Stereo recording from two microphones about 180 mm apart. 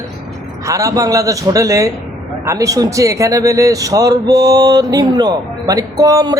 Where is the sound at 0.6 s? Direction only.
15° right (ahead or behind).